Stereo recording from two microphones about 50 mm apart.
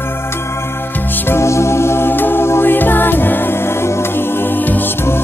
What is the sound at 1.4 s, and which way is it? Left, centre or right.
Music, left.